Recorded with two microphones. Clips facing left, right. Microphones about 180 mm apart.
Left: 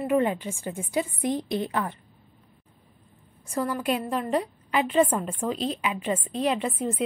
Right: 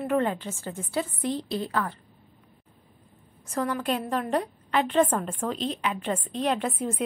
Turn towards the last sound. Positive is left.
turn(degrees=0)  # may be behind; listen again after turning